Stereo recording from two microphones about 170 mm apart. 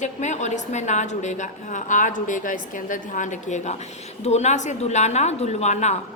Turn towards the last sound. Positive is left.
turn(degrees=40)  # may be behind; listen again after turning